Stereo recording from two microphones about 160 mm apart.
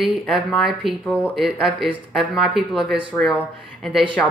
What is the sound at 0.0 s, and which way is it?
Speech, centre (ahead or behind).